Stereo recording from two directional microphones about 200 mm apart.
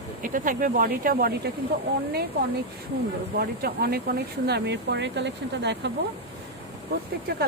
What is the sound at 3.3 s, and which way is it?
Speech, 50° right (ahead or behind).